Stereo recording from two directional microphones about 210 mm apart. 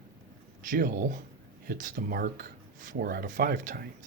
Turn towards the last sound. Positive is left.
turn(degrees=-40)  # may be behind; listen again after turning